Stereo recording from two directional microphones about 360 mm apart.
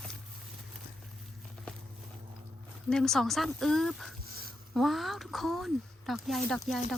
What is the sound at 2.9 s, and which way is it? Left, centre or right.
Speech, centre.